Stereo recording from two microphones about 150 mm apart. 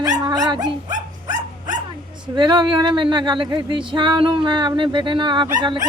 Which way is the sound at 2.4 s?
30° right (ahead or behind).